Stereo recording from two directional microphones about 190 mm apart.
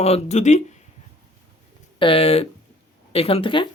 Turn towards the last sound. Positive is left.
turn(degrees=25)  # may be behind; listen again after turning